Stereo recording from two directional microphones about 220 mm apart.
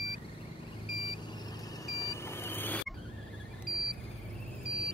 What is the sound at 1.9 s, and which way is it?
Vehicle, 15° left (ahead or behind).